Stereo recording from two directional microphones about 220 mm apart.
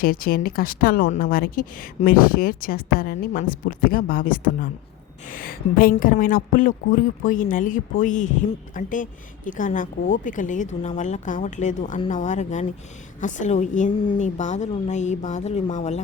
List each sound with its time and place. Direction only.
0.0 s speech: 40° left (ahead or behind)